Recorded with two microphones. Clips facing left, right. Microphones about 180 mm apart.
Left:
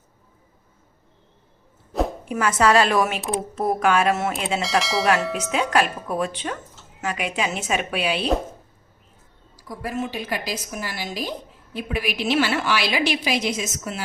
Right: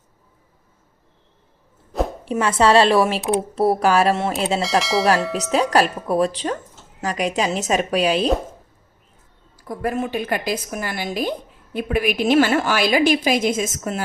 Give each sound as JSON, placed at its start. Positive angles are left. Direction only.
{"t": 2.2, "sound": "a woman's voice", "side_deg": -30}
{"t": 4.6, "sound": "speech", "side_deg": 0}
{"t": 5.7, "sound": "a woman's voice", "side_deg": -35}
{"t": 9.6, "sound": "a woman's voice", "side_deg": -55}